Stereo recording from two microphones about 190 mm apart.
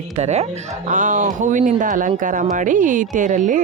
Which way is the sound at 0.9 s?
40° right (ahead or behind).